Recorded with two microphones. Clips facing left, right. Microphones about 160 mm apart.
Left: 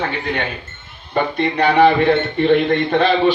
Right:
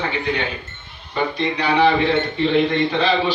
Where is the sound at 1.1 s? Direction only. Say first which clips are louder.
Left 4 dB; 55° left (ahead or behind).